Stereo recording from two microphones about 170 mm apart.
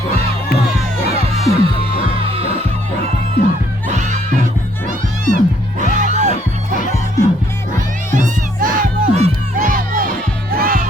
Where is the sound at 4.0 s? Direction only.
45° right (ahead or behind).